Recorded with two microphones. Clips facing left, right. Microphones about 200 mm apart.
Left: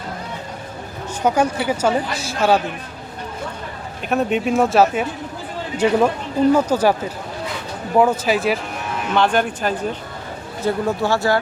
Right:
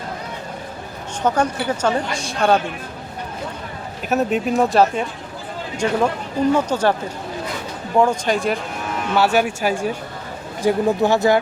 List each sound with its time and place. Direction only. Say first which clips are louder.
1.2 s a woman's voice: left 1 dB; 10° left (ahead or behind)
4.1 s a woman's voice: even; centre (ahead or behind)
7.9 s speech: left 1 dB; 5° left (ahead or behind)
9.1 s speech: right 1 dB; 10° right (ahead or behind)